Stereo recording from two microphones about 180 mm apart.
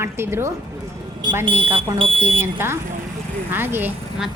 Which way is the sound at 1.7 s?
30° right (ahead or behind).